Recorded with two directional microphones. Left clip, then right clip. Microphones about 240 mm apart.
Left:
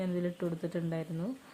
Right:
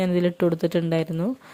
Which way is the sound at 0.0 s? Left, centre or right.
Right.